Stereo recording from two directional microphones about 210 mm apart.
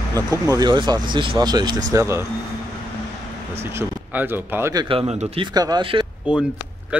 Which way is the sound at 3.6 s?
10° right (ahead or behind).